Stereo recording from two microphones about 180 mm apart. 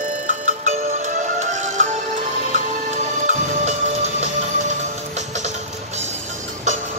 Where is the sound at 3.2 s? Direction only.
40° right (ahead or behind).